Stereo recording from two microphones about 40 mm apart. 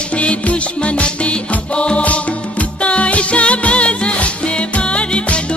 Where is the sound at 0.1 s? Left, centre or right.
Left.